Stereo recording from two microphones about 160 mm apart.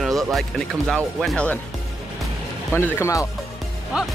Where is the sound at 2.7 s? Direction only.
15° left (ahead or behind).